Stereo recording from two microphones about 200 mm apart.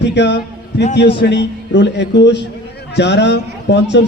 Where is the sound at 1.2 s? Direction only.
60° left (ahead or behind).